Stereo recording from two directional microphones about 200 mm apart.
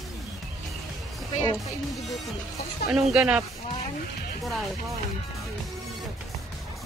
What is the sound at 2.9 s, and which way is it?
Speech, 5° right (ahead or behind).